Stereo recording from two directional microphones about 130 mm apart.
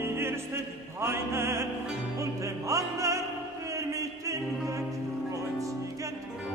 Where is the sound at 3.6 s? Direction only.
25° right (ahead or behind).